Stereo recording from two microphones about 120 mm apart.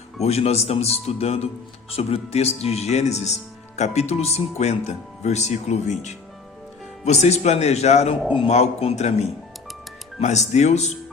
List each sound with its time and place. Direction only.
0.2 s speech: 60° left (ahead or behind)